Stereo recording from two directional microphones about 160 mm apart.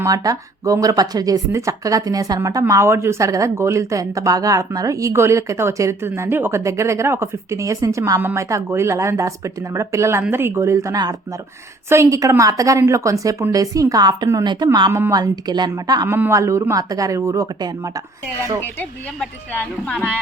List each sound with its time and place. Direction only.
0.0 s speech: 20° right (ahead or behind)